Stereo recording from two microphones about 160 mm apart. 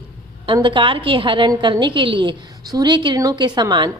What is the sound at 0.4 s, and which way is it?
A woman's voice, 30° right (ahead or behind).